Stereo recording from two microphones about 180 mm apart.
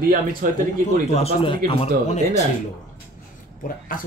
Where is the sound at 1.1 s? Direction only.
35° left (ahead or behind).